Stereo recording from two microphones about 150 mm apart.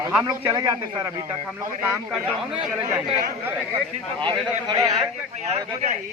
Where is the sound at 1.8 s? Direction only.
10° right (ahead or behind).